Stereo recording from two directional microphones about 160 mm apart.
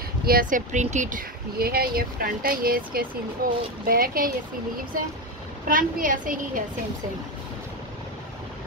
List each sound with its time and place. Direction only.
0.2 s speech: 65° right (ahead or behind)
5.7 s speech: 60° right (ahead or behind)